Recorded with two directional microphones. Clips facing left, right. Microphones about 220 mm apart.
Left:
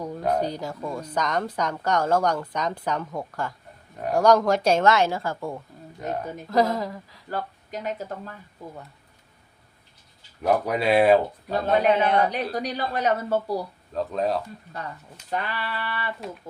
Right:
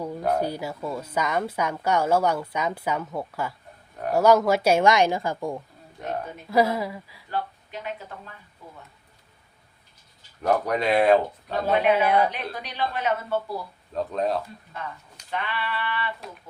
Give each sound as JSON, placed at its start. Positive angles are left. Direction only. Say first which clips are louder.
{"t": 0.0, "sound": "a woman's voice", "louder": "even", "side_deg": -10}
{"t": 6.0, "sound": "a woman's voice", "louder": "left 1 dB", "side_deg": -5}
{"t": 7.3, "sound": "speech", "louder": "even", "side_deg": 40}
{"t": 10.4, "sound": "speech", "louder": "left 1 dB", "side_deg": 5}
{"t": 11.9, "sound": "a woman's voice", "louder": "even", "side_deg": -10}
{"t": 12.3, "sound": "speech", "louder": "left 7 dB", "side_deg": 40}
{"t": 13.9, "sound": "speech", "louder": "even", "side_deg": 0}
{"t": 15.3, "sound": "speech", "louder": "left 1 dB", "side_deg": 40}